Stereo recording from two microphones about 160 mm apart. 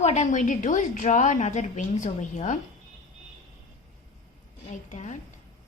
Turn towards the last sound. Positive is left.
turn(degrees=50)  # may be behind; listen again after turning